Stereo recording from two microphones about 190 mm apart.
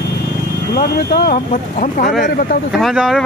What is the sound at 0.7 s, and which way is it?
Speech, 50° left (ahead or behind).